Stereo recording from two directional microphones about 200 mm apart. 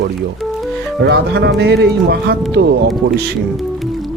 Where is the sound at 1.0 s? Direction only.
55° right (ahead or behind).